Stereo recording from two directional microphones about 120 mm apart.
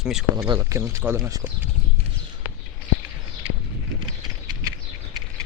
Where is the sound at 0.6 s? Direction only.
25° right (ahead or behind).